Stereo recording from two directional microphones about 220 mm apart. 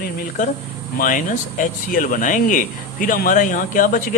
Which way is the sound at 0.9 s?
40° left (ahead or behind).